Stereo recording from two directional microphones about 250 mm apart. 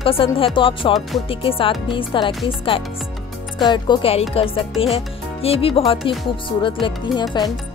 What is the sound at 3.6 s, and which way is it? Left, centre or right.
Speech, centre.